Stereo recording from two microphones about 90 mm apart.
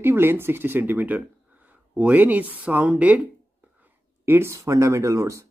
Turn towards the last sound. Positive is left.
turn(degrees=-35)  # may be behind; listen again after turning